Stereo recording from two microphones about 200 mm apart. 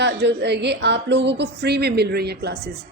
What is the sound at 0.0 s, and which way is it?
Speech, 60° right (ahead or behind).